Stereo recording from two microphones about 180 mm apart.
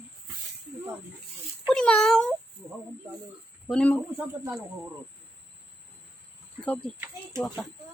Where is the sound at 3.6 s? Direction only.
5° left (ahead or behind).